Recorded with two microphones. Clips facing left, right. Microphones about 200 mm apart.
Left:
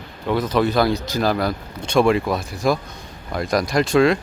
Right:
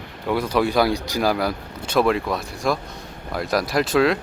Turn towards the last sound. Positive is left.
turn(degrees=-5)  # may be behind; listen again after turning